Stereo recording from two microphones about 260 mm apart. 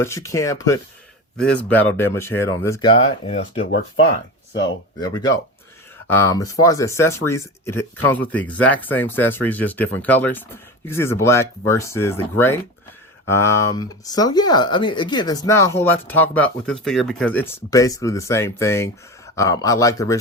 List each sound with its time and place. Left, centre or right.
0.0 s speech: centre
2.9 s speech: left
4.9 s speech: centre